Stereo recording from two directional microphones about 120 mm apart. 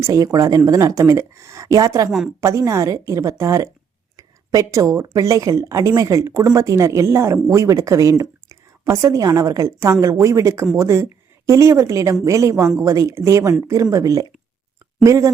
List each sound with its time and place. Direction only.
0.0 s speech: 25° right (ahead or behind)
2.0 s a woman's voice: 5° right (ahead or behind)
2.4 s a woman's voice: 25° right (ahead or behind)